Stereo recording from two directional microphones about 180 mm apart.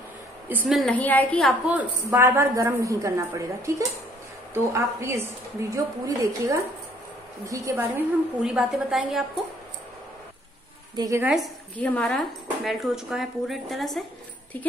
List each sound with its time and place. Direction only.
0.7 s a woman's voice: 5° left (ahead or behind)
2.0 s a woman's voice: 15° right (ahead or behind)
11.0 s a woman's voice: 15° right (ahead or behind)
11.2 s a woman's voice: centre (ahead or behind)